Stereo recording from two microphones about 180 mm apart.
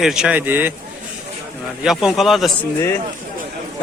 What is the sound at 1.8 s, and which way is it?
Speech, 5° right (ahead or behind).